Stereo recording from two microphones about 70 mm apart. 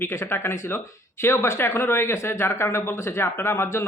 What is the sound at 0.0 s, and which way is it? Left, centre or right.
Speech, left.